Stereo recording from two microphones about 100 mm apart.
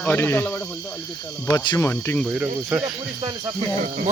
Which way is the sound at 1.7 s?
25° left (ahead or behind).